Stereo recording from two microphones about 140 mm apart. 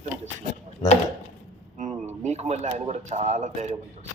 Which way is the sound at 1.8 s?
55° right (ahead or behind).